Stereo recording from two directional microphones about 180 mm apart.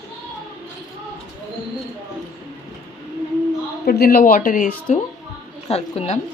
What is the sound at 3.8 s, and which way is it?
Speech, 55° left (ahead or behind).